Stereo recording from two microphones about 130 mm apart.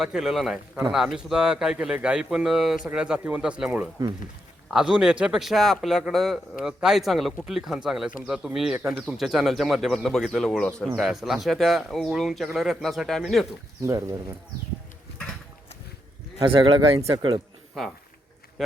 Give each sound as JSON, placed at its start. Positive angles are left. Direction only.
{"t": 0.0, "sound": "a man's voice", "side_deg": -5}
{"t": 13.8, "sound": "speech", "side_deg": -20}
{"t": 16.4, "sound": "speech", "side_deg": -40}
{"t": 17.8, "sound": "a man's voice", "side_deg": 0}